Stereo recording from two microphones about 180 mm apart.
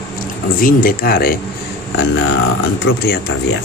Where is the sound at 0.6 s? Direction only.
55° left (ahead or behind).